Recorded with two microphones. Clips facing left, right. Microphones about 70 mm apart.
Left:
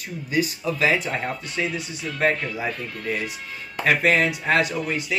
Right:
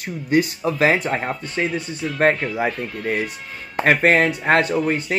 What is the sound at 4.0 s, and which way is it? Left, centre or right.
Speech, right.